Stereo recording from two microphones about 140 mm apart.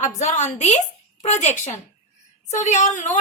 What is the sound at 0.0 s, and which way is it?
A woman's voice, 55° left (ahead or behind).